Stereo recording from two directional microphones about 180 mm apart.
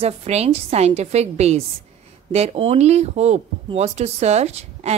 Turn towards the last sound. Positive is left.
turn(degrees=-35)  # may be behind; listen again after turning